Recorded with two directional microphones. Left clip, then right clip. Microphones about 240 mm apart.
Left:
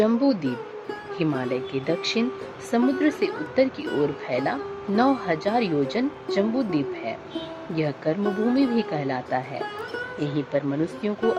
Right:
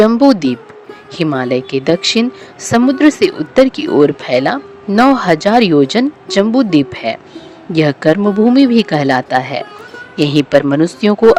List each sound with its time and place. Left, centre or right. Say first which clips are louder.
0.0 s speech: right 13 dB; right